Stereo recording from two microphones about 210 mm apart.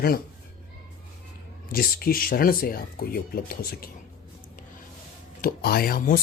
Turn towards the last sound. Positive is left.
turn(degrees=45)  # may be behind; listen again after turning